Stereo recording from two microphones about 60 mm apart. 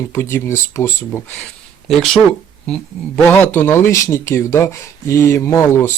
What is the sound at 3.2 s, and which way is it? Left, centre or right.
Speech, left.